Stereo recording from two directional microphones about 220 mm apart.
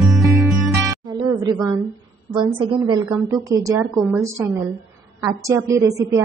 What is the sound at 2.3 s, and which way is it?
A woman's voice, 20° right (ahead or behind).